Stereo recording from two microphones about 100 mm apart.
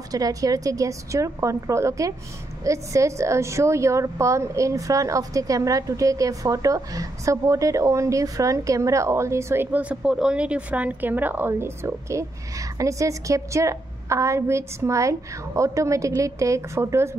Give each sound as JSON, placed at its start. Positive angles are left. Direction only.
{"t": 0.1, "sound": "a woman's voice", "side_deg": -35}